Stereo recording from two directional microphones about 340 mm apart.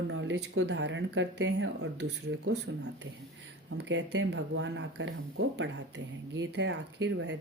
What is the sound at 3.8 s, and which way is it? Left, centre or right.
Speech, right.